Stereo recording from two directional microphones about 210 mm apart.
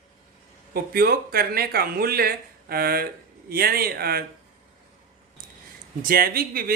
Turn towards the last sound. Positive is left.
turn(degrees=-45)  # may be behind; listen again after turning